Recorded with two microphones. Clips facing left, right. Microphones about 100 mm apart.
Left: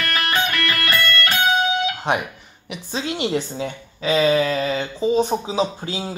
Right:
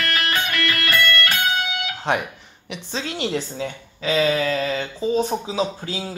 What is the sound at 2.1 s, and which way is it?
A woman's voice, 15° left (ahead or behind).